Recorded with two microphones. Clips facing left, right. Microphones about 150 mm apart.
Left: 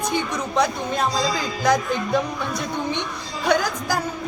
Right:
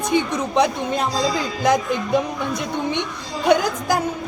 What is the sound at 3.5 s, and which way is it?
Speech, 25° right (ahead or behind).